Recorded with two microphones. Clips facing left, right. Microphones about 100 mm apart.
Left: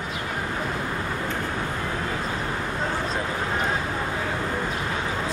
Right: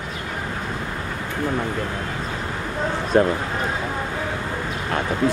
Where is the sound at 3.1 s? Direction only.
60° right (ahead or behind).